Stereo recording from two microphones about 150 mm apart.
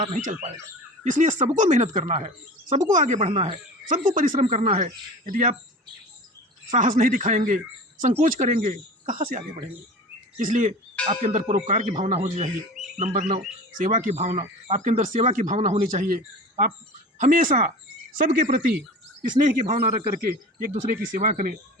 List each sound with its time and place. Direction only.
0.0 s speech: 55° right (ahead or behind)
3.8 s speech: 65° right (ahead or behind)
5.3 s speech: 65° right (ahead or behind)
6.7 s speech: 60° right (ahead or behind)
11.1 s speech: 50° right (ahead or behind)
11.5 s speech: 55° right (ahead or behind)
19.6 s speech: 55° right (ahead or behind)
20.2 s speech: 85° right; by 21.5 s 60° right (ahead or behind)